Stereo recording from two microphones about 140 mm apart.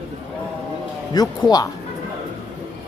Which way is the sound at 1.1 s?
30° left (ahead or behind).